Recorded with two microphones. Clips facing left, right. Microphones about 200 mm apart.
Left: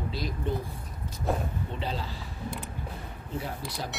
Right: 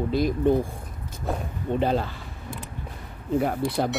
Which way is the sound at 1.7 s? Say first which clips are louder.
Right 14 dB; 55° right (ahead or behind).